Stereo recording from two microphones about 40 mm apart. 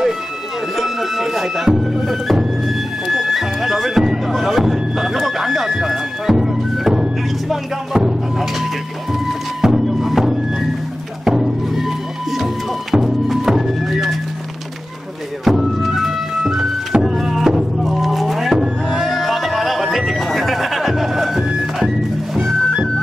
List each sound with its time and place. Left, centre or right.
0.7 s music: centre
4.3 s a sound: centre
7.4 s music: centre
9.6 s music: centre
15.4 s music: centre